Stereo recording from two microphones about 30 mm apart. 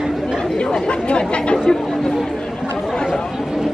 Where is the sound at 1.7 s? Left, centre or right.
Left.